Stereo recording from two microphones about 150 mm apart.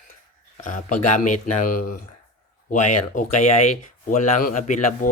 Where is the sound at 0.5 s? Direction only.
55° left (ahead or behind).